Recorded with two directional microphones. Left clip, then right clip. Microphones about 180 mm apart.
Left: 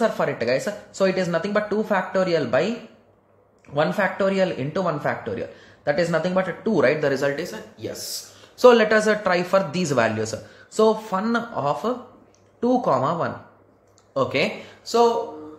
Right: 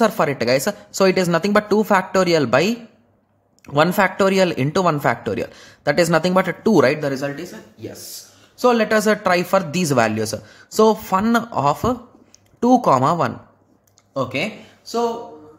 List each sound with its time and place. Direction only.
0.0 s speech: 40° right (ahead or behind)
7.2 s speech: 15° right (ahead or behind)
8.5 s speech: 20° right (ahead or behind)
14.1 s speech: 20° right (ahead or behind)
15.0 s speech: centre (ahead or behind)